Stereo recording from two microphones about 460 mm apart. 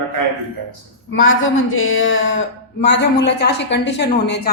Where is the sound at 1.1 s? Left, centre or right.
Left.